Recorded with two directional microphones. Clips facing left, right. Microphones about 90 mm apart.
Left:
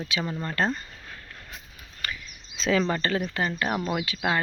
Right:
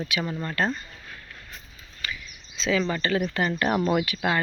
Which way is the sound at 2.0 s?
50° left (ahead or behind).